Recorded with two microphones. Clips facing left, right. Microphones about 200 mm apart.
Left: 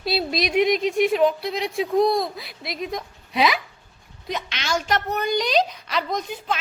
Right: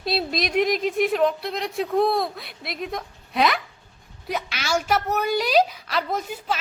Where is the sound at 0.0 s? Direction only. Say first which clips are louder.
Left 1 dB; centre (ahead or behind).